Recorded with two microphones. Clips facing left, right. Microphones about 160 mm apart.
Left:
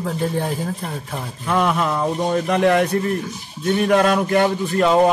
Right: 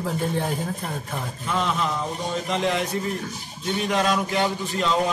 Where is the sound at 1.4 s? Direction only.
55° left (ahead or behind).